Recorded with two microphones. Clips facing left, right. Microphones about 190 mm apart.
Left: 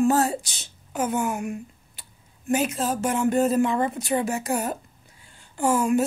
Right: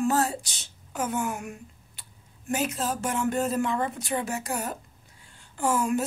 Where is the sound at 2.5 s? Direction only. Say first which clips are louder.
Left 4 dB; 10° left (ahead or behind).